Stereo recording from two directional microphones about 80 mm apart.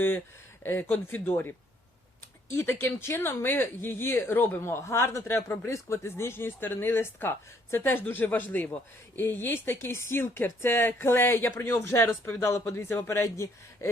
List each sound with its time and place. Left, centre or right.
0.6 s speech: left
2.7 s speech: left